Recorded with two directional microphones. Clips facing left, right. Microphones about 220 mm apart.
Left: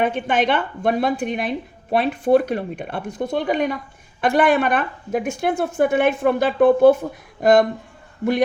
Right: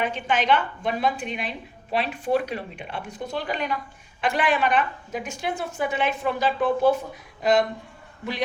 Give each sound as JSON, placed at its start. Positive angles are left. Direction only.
{"t": 0.0, "sound": "speech", "side_deg": 55}
{"t": 8.2, "sound": "speech", "side_deg": 50}